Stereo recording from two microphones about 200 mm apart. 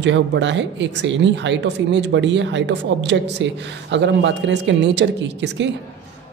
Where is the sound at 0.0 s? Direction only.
60° right (ahead or behind).